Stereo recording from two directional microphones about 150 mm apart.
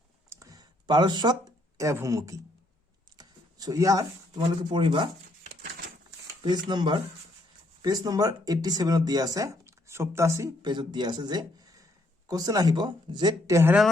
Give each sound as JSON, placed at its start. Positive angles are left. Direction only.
{"t": 0.3, "sound": "a sound", "side_deg": -25}
{"t": 3.2, "sound": "speech", "side_deg": -25}
{"t": 6.4, "sound": "speech", "side_deg": -30}